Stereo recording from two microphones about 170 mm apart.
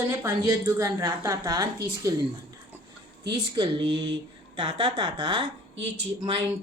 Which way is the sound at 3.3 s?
25° right (ahead or behind).